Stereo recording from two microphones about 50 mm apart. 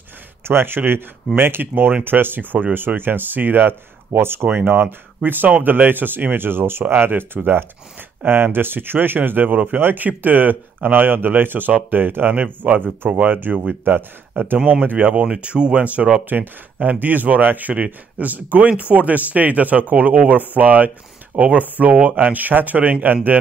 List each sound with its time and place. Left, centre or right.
0.4 s speech: right